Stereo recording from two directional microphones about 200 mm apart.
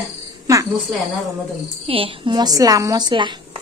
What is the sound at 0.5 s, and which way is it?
Cricket, 15° right (ahead or behind).